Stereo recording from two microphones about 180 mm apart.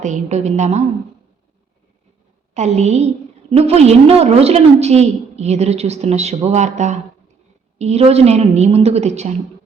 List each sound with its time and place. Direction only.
0.0 s a woman's voice: 40° right (ahead or behind)
2.6 s a woman's voice: 40° right (ahead or behind)